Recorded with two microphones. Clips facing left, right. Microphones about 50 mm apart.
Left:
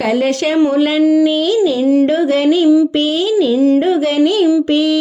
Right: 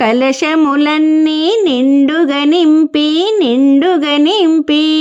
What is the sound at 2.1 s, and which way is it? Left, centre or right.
Speech, right.